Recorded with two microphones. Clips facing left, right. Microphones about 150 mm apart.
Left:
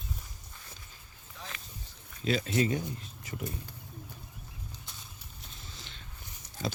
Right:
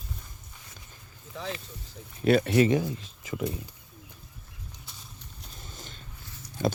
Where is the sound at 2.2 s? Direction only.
60° right (ahead or behind); by 3.5 s 90° right.